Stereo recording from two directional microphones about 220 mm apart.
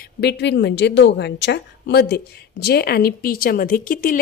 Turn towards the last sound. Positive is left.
turn(degrees=40)  # may be behind; listen again after turning